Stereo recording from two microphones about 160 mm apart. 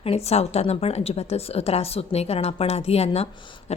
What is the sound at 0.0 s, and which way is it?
A woman's voice, 40° left (ahead or behind).